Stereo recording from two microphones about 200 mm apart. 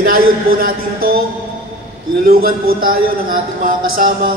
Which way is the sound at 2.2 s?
45° right (ahead or behind).